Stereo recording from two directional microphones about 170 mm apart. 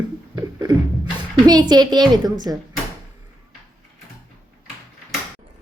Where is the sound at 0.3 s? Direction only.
25° right (ahead or behind).